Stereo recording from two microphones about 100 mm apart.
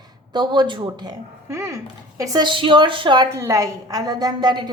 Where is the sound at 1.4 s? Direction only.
30° right (ahead or behind).